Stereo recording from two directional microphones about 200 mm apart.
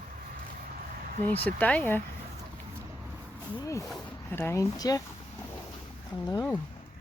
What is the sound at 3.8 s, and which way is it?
Speech, centre (ahead or behind).